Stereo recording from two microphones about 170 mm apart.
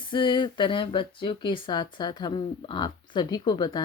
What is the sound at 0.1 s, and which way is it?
Speech, 25° left (ahead or behind).